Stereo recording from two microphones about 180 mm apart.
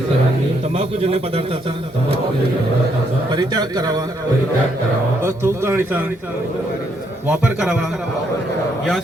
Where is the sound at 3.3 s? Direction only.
25° right (ahead or behind).